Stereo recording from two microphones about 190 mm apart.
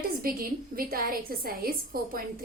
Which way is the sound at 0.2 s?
50° right (ahead or behind).